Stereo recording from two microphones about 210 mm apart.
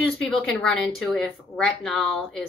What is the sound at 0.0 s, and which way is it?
Speech, 5° left (ahead or behind).